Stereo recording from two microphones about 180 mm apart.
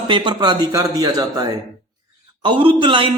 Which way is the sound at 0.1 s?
25° right (ahead or behind).